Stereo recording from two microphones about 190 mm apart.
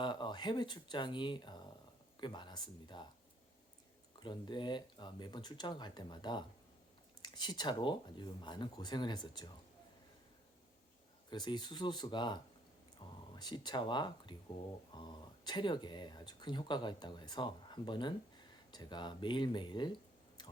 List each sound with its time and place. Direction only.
0.0 s speech: 25° left (ahead or behind)
4.2 s speech: 25° left (ahead or behind)
11.3 s speech: 25° left (ahead or behind)